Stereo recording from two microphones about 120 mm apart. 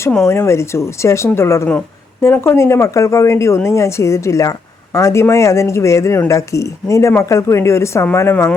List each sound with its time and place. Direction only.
0.3 s speech: 20° left (ahead or behind)